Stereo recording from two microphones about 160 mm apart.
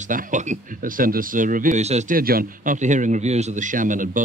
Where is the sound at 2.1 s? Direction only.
65° right (ahead or behind).